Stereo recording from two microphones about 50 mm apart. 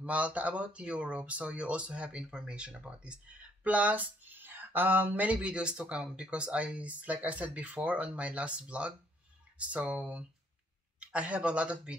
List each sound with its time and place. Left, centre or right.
0.0 s speech: right
5.2 s speech: right